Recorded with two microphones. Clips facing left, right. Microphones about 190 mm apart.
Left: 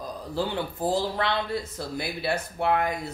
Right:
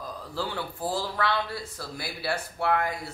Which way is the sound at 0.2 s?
20° left (ahead or behind).